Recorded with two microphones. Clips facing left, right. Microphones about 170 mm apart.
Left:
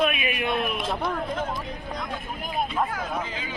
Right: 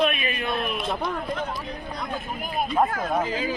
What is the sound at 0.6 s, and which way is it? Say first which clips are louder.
Speech: even; centre (ahead or behind).